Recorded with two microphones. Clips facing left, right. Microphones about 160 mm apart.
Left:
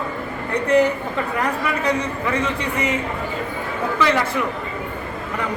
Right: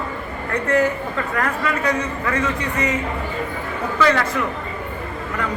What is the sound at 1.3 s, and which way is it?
A man's voice, 15° left (ahead or behind).